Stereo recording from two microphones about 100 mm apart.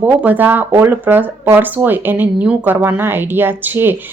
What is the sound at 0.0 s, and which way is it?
A woman's voice, 15° right (ahead or behind).